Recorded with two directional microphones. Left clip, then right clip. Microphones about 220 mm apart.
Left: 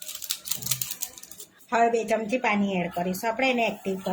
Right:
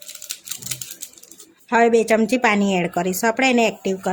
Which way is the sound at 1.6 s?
35° right (ahead or behind).